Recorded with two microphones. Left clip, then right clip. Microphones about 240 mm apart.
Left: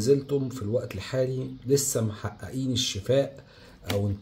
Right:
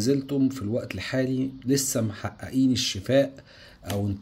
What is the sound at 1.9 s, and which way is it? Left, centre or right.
Speech, right.